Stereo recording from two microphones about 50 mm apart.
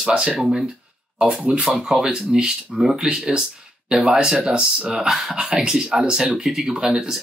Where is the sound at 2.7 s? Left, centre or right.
Centre.